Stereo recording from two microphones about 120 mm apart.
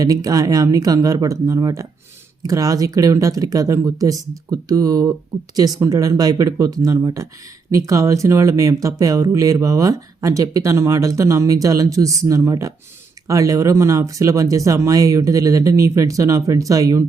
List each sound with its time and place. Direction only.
0.0 s speech: 30° right (ahead or behind)